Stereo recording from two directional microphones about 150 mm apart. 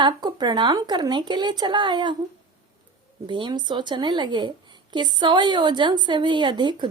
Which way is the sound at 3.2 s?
30° right (ahead or behind).